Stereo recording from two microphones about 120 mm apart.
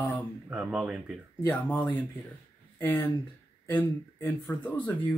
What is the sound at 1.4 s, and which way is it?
Speech, 15° left (ahead or behind).